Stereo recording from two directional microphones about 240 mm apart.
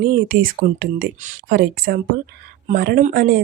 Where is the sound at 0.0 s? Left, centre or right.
Right.